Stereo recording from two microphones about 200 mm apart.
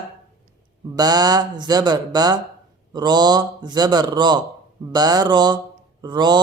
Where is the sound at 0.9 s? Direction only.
20° right (ahead or behind).